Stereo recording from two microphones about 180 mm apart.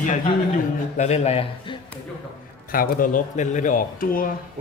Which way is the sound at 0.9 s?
40° left (ahead or behind).